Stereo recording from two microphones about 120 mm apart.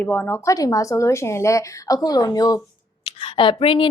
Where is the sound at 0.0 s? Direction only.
15° left (ahead or behind); by 2.6 s 30° left (ahead or behind).